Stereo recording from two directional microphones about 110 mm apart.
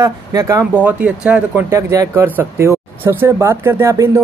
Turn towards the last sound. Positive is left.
turn(degrees=-25)  # may be behind; listen again after turning